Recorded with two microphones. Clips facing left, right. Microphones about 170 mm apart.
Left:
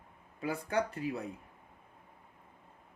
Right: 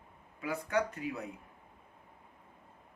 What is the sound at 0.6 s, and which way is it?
Speech, 30° left (ahead or behind).